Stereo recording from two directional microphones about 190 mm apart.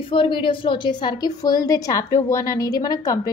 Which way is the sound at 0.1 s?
25° left (ahead or behind).